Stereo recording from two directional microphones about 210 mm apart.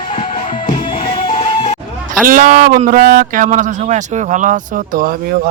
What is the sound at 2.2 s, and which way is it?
Speech, 40° right (ahead or behind).